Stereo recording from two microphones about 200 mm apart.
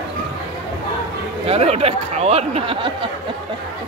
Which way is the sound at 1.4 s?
30° right (ahead or behind).